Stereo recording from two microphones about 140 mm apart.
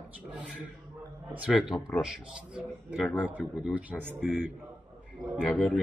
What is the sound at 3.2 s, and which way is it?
Speech, 10° right (ahead or behind).